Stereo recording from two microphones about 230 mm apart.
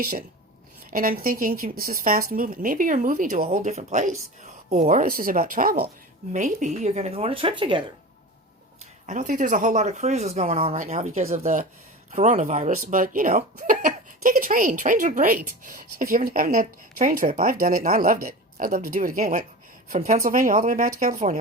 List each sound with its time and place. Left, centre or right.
0.0 s speech: right
9.0 s speech: right